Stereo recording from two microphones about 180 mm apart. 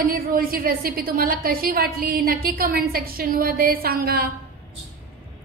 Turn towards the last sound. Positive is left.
turn(degrees=-55)  # may be behind; listen again after turning